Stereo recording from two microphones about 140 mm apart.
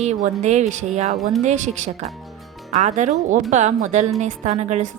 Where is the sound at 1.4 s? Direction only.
55° right (ahead or behind).